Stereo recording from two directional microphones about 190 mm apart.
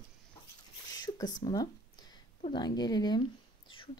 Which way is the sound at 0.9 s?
20° left (ahead or behind).